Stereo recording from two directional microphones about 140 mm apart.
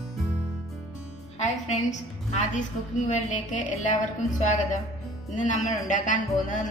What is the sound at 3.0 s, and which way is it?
Speech, 60° left (ahead or behind).